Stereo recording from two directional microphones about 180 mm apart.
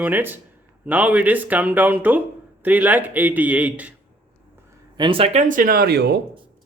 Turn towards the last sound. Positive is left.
turn(degrees=-65)  # may be behind; listen again after turning